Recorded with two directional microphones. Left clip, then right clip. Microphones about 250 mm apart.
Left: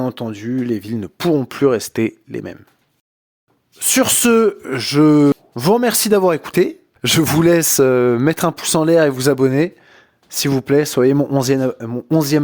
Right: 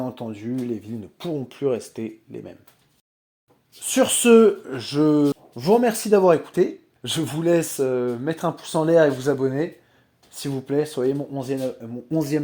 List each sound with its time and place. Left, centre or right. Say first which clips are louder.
0.0 s speech: left 7 dB; left
3.8 s speech: left 5 dB; left
5.9 s speech: left 2 dB; left